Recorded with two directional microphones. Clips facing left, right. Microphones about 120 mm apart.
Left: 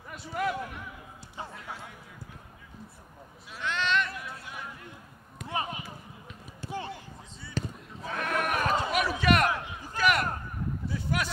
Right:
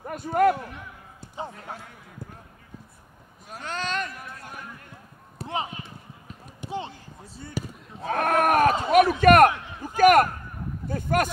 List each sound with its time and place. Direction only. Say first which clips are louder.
0.0 s a man's voice: right 11 dB; 50° right (ahead or behind)
3.4 s a sound: left 1 dB; 45° right (ahead or behind)
5.5 s speech: right 2 dB; 20° right (ahead or behind)
6.6 s run: right 4 dB; 20° right (ahead or behind)
7.6 s basketball bounce: right 1 dB; 10° right (ahead or behind)
8.0 s a sound: right 9 dB; 50° right (ahead or behind)
10.9 s speech: right 9 dB; 50° right (ahead or behind)